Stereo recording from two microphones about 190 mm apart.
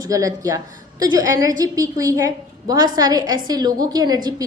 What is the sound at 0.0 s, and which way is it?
A woman's voice, 20° right (ahead or behind).